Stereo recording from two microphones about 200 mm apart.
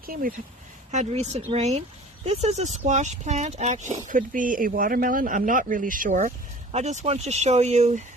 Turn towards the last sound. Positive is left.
turn(degrees=-35)  # may be behind; listen again after turning